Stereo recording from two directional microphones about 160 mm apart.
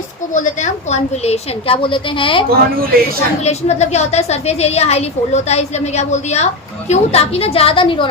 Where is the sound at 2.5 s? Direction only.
70° right (ahead or behind).